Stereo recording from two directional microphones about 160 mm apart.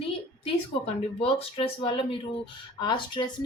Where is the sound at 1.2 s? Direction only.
35° left (ahead or behind).